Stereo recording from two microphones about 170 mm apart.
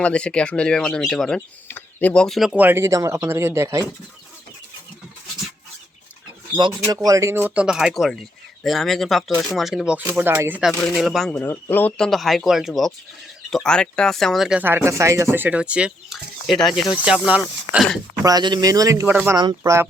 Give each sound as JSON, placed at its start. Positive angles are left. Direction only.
{"t": 0.0, "sound": "speech", "side_deg": 5}
{"t": 2.6, "sound": "speech", "side_deg": -15}
{"t": 6.6, "sound": "speech", "side_deg": -25}
{"t": 10.0, "sound": "speech", "side_deg": -15}
{"t": 10.7, "sound": "speech", "side_deg": 0}
{"t": 18.2, "sound": "speech", "side_deg": -20}
{"t": 19.4, "sound": "speech", "side_deg": -20}